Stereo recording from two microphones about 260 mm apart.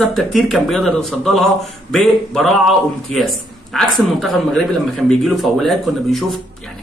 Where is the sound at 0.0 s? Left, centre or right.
Centre.